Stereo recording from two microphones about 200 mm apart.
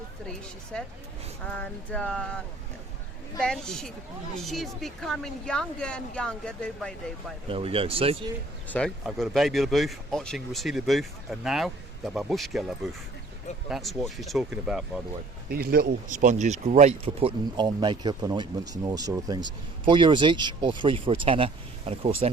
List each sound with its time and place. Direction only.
0.3 s speech: 5° left (ahead or behind)
1.5 s a sound: 5° left (ahead or behind)
3.4 s speech: 5° left (ahead or behind)
7.4 s speech: 25° right (ahead or behind)
8.7 s speech: 5° left (ahead or behind)
15.4 s speech: 50° right (ahead or behind); by 22.3 s 30° right (ahead or behind)